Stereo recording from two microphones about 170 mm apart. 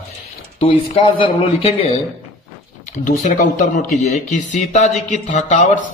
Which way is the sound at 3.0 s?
50° left (ahead or behind).